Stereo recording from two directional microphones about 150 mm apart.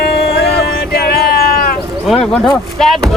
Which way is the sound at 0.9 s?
90° left.